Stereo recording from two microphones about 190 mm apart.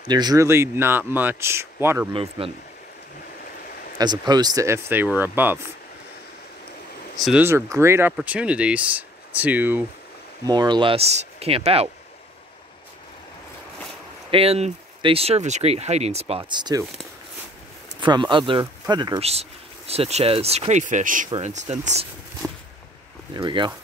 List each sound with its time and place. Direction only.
0.0 s speech: 20° right (ahead or behind)
2.1 s speech: 30° right (ahead or behind)
4.0 s speech: 20° right (ahead or behind)
7.2 s speech: centre (ahead or behind)
7.4 s speech: 15° right (ahead or behind)
10.4 s speech: 20° right (ahead or behind)
14.3 s speech: 30° right (ahead or behind)
18.0 s speech: 25° right (ahead or behind)
23.3 s speech: 25° right (ahead or behind)